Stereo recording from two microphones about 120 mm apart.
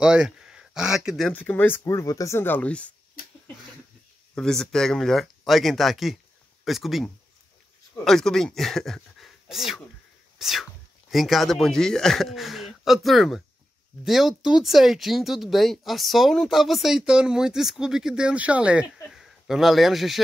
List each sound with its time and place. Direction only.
0.0 s speech: 5° right (ahead or behind)
1.3 s speech: 15° left (ahead or behind)
1.9 s speech: 25° left (ahead or behind); by 2.9 s 10° left (ahead or behind)
4.4 s speech: 5° left (ahead or behind)